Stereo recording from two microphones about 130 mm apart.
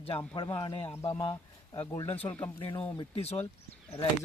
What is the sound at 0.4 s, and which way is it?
Speech, 30° left (ahead or behind).